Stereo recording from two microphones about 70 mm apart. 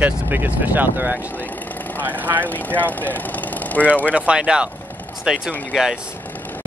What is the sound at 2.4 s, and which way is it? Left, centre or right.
Speech, left.